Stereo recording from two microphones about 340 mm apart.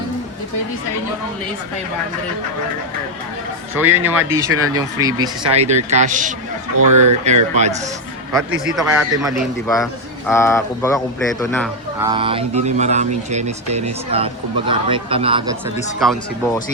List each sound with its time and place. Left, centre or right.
3.8 s speech: centre; by 6.3 s right
6.7 s speech: right
7.3 s speech: centre
8.7 s speech: centre
11.9 s speech: centre
16.0 s speech: centre